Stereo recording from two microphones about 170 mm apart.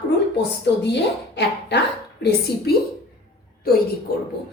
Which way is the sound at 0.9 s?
90° left.